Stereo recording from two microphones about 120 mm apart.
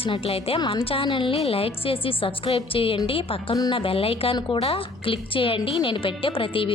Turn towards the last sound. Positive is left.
turn(degrees=50)  # may be behind; listen again after turning